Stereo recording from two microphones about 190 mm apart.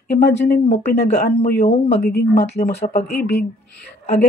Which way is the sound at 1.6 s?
35° left (ahead or behind).